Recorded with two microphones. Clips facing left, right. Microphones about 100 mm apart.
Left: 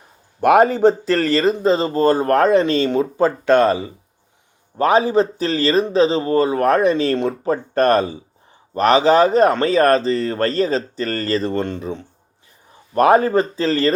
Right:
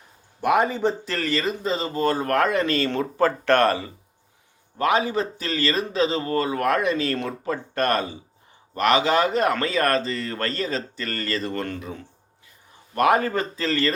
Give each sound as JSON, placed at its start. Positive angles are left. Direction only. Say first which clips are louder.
{"t": 0.4, "sound": "a man's voice", "louder": "left 8 dB", "side_deg": 70}
{"t": 1.0, "sound": "speech", "louder": "left 9 dB", "side_deg": 40}
{"t": 4.8, "sound": "speech", "louder": "left 7 dB", "side_deg": 35}